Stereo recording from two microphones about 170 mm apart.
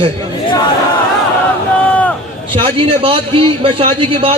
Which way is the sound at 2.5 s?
30° right (ahead or behind).